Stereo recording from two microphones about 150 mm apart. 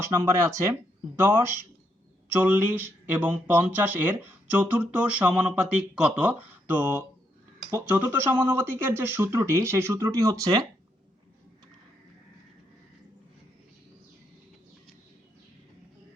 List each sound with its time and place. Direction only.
0.1 s speech: 20° right (ahead or behind)
2.3 s speech: 15° right (ahead or behind)